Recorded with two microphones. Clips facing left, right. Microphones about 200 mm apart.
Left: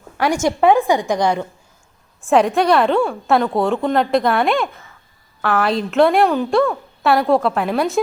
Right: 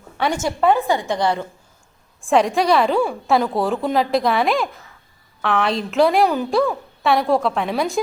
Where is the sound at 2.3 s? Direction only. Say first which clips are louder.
Left 2 dB; centre (ahead or behind).